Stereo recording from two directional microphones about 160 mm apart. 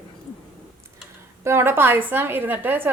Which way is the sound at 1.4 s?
15° right (ahead or behind).